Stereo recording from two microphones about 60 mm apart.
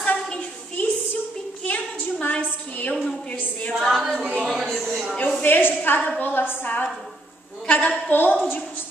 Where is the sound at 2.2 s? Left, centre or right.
Left.